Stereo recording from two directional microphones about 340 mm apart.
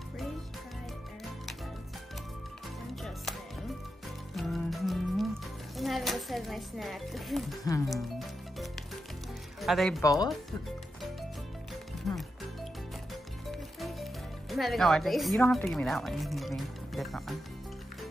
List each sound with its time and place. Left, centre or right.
4.4 s music: centre
5.8 s speech: centre
7.9 s music: centre
9.6 s speech: centre
12.1 s music: centre
14.5 s speech: centre